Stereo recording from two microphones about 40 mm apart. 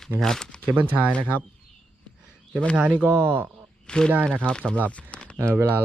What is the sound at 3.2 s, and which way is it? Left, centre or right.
Speech, right.